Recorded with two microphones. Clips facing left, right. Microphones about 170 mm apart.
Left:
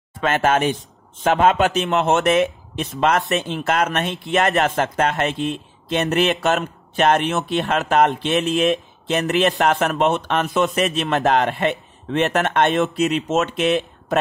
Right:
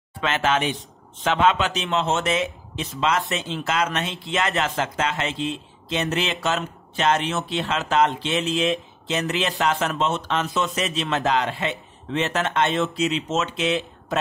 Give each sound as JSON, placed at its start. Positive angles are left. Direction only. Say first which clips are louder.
{"t": 0.2, "sound": "speech", "louder": "left 4 dB", "side_deg": 50}